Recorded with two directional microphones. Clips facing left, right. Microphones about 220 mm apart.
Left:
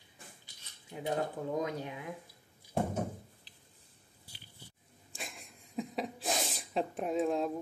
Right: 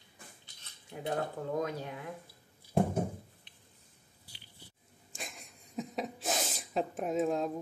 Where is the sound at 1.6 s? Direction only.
15° left (ahead or behind).